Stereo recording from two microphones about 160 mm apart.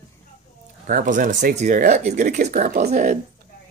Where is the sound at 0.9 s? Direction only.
55° right (ahead or behind).